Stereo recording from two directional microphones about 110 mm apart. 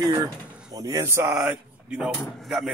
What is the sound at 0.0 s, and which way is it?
Speech, 35° right (ahead or behind).